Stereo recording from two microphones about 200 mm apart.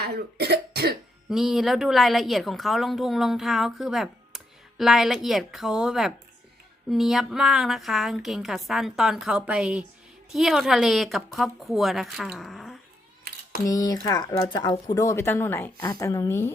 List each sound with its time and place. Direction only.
0.0 s cough: 55° right (ahead or behind)
1.3 s a woman's voice: centre (ahead or behind)
13.7 s speech: 20° left (ahead or behind)